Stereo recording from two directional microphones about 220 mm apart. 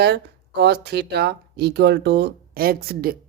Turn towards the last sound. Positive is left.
turn(degrees=-45)  # may be behind; listen again after turning